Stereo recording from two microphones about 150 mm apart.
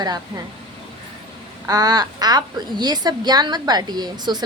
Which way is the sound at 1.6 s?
25° right (ahead or behind).